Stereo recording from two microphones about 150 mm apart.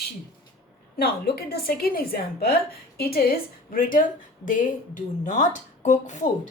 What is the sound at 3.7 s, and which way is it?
Speech, 70° left (ahead or behind).